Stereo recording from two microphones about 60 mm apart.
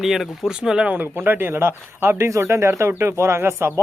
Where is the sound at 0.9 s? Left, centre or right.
Right.